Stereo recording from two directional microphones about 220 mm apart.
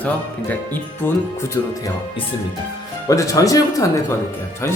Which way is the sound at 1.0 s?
10° left (ahead or behind).